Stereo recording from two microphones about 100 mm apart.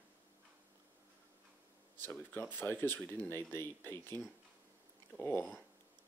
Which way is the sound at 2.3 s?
20° left (ahead or behind).